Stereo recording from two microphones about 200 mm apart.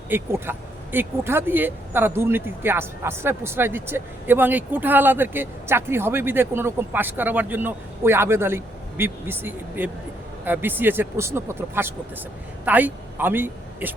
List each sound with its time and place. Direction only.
0.1 s speech: 10° right (ahead or behind)